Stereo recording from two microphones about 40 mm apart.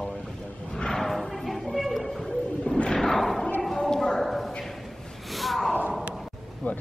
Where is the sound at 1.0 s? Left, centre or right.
Centre.